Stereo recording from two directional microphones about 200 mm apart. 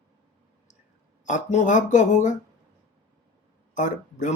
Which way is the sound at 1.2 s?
35° left (ahead or behind).